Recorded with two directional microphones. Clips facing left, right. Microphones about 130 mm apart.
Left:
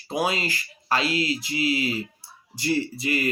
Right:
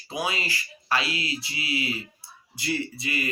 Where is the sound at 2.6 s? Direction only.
40° left (ahead or behind).